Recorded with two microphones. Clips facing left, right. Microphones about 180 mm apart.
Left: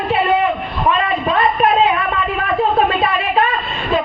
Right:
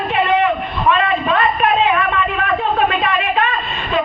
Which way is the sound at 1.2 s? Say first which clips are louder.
Left 1 dB; 35° left (ahead or behind).